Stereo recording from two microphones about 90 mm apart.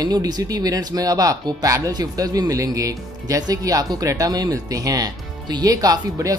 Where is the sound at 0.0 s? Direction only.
45° right (ahead or behind).